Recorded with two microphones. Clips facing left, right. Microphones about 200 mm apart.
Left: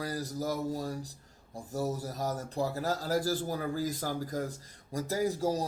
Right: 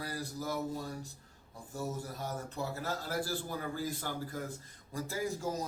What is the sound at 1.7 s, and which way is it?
A man's voice, 40° left (ahead or behind).